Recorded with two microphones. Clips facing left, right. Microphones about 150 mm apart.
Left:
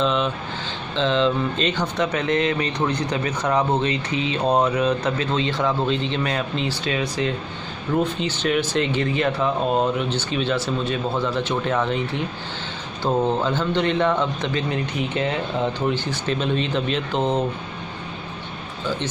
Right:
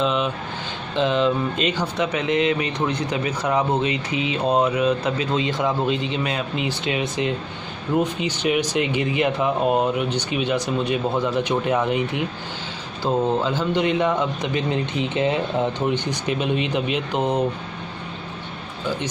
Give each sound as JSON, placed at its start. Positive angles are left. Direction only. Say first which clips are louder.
{"t": 0.0, "sound": "a sound", "louder": "even", "side_deg": -5}
{"t": 0.9, "sound": "speech", "louder": "even", "side_deg": -10}
{"t": 6.7, "sound": "speech", "louder": "even", "side_deg": -20}